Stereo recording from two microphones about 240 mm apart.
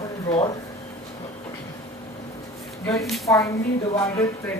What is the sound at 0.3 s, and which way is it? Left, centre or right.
Speech, centre.